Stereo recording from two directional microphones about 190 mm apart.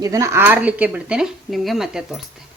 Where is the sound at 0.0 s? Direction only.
15° right (ahead or behind).